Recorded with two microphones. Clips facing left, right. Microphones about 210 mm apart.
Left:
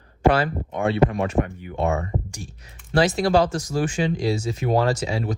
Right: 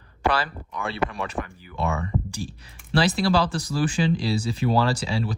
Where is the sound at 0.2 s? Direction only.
40° left (ahead or behind).